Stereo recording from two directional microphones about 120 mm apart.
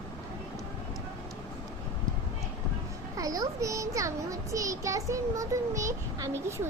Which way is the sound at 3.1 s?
30° right (ahead or behind).